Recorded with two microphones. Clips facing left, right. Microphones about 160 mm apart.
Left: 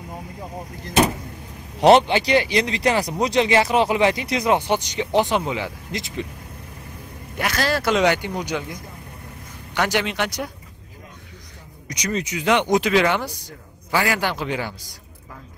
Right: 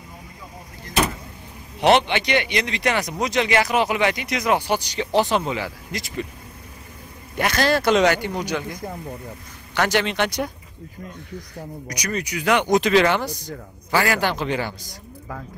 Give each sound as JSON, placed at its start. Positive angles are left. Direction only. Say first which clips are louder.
{"t": 1.8, "sound": "speech", "louder": "left 3 dB", "side_deg": 40}
{"t": 7.3, "sound": "speech", "louder": "right 3 dB", "side_deg": 0}
{"t": 9.8, "sound": "speech", "louder": "right 1 dB", "side_deg": 10}
{"t": 11.9, "sound": "speech", "louder": "left 2 dB", "side_deg": 25}